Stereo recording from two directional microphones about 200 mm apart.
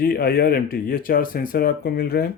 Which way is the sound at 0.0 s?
50° left (ahead or behind).